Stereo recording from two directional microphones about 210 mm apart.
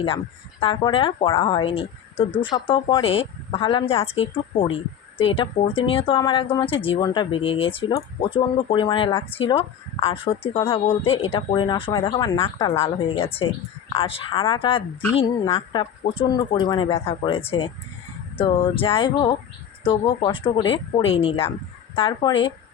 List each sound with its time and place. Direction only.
0.6 s speech: 25° left (ahead or behind)